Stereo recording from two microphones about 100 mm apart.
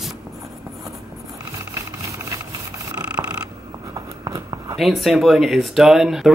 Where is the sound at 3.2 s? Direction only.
45° right (ahead or behind).